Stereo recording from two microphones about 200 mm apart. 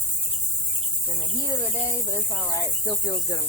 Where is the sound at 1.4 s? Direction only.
15° left (ahead or behind).